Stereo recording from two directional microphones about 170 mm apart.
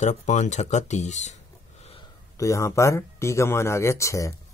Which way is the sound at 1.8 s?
35° left (ahead or behind).